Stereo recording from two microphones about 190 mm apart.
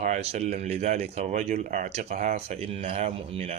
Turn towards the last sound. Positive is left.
turn(degrees=-30)  # may be behind; listen again after turning